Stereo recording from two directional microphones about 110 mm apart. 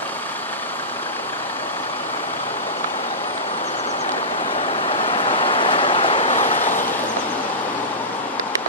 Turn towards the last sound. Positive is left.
turn(degrees=90)